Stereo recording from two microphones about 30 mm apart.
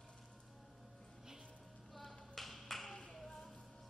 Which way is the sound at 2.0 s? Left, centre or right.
Centre.